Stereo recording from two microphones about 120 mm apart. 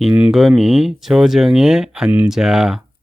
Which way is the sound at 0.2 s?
5° right (ahead or behind).